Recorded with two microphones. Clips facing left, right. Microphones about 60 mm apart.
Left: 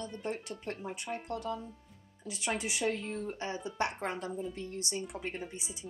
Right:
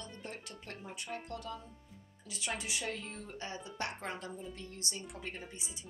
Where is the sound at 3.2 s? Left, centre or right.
Left.